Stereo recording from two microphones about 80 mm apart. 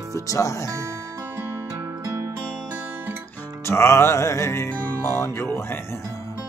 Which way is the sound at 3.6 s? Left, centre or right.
Left.